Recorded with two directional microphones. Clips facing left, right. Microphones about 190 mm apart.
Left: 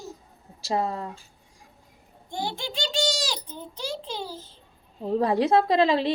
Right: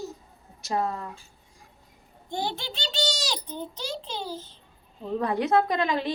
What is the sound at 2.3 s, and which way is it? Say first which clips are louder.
A child's voice: even; 10° left (ahead or behind).